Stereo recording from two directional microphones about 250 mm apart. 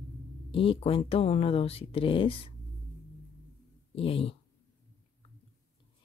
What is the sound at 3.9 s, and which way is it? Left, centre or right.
Speech, left.